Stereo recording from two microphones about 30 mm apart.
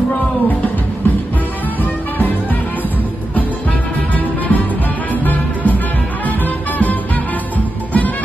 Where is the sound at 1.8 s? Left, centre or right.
Left.